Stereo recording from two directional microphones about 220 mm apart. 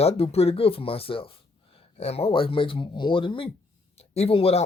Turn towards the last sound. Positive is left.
turn(degrees=25)  # may be behind; listen again after turning